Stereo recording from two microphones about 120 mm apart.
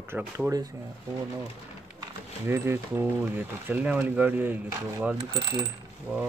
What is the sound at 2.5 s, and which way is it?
Speech, 20° right (ahead or behind).